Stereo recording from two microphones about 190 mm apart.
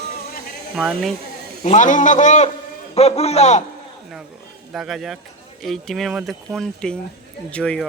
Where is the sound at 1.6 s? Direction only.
40° left (ahead or behind).